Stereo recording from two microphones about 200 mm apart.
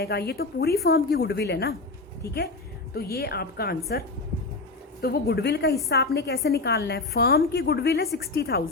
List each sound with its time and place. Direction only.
0.0 s a woman's voice: 50° left (ahead or behind)
2.9 s a woman's voice: 50° left (ahead or behind)
5.0 s a woman's voice: 50° left (ahead or behind)